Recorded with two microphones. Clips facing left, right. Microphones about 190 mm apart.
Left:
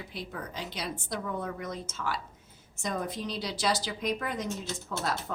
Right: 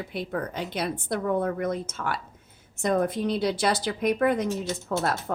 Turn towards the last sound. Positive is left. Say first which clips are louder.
# right 6 dB
turn(degrees=-55)  # may be behind; listen again after turning